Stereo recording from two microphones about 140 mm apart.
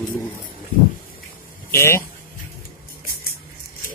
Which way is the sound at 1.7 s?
20° left (ahead or behind).